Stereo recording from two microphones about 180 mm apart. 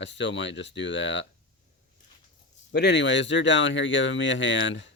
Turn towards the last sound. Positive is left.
turn(degrees=90)